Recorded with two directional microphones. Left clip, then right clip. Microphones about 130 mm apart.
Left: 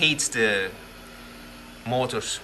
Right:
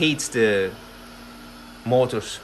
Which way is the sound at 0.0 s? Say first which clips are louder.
Right 1 dB; 65° right (ahead or behind).